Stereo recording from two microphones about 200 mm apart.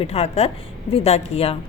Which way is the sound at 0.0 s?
30° left (ahead or behind).